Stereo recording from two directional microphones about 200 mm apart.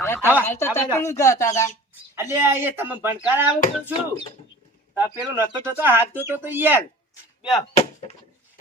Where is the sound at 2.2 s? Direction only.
10° right (ahead or behind).